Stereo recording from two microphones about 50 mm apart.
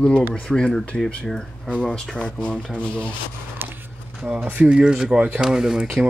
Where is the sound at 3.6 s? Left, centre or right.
Right.